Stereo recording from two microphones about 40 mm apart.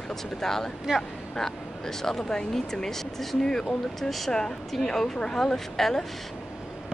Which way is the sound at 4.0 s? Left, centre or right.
Centre.